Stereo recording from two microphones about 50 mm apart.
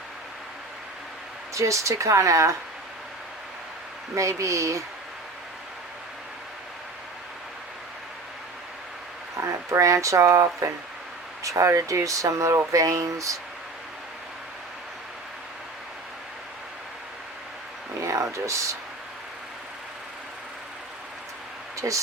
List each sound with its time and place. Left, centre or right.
1.5 s speech: right
4.1 s speech: right
9.4 s speech: right
18.0 s speech: right
21.8 s speech: right